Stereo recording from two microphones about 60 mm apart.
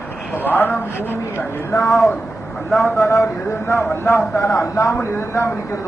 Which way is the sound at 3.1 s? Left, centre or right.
Left.